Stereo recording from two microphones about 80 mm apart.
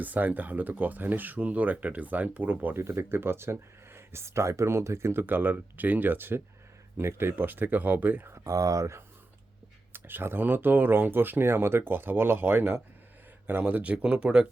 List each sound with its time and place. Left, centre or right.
0.0 s speech: right
8.3 s speech: right
9.9 s speech: right